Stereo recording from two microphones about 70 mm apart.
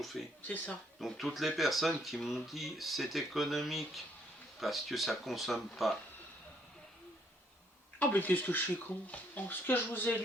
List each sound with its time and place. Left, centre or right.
0.4 s speech: left
0.9 s speech: centre
7.9 s speech: left